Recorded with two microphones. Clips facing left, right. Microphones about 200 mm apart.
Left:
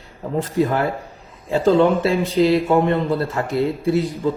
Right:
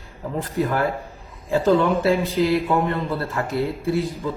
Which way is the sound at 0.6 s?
30° left (ahead or behind).